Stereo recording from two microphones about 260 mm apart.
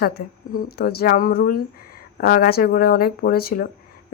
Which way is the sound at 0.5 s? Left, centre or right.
Left.